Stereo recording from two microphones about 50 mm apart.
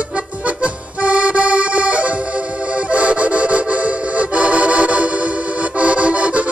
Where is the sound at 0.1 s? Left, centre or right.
Right.